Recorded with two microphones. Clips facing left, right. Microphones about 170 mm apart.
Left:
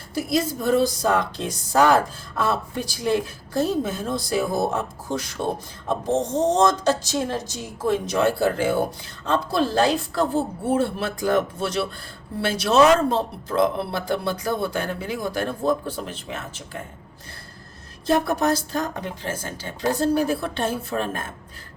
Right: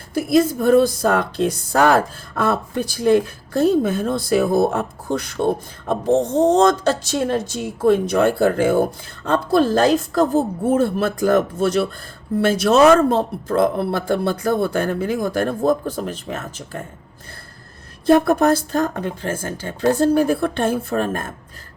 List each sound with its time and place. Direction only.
0.1 s speech: 55° right (ahead or behind)
18.0 s speech: 55° right (ahead or behind)